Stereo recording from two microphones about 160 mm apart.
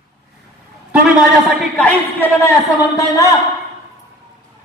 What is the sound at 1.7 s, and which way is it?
Speech, 10° left (ahead or behind).